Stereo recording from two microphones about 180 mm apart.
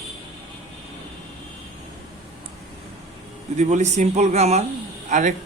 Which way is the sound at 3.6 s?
40° right (ahead or behind).